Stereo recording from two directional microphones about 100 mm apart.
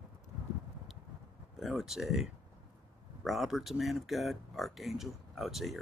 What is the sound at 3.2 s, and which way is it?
Speech, centre (ahead or behind).